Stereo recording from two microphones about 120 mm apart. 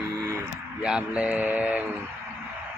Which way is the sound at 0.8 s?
10° right (ahead or behind).